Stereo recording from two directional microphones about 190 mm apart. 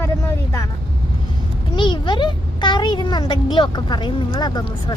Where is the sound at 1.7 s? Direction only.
25° left (ahead or behind).